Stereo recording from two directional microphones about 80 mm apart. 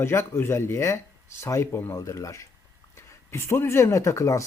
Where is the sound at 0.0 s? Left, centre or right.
Left.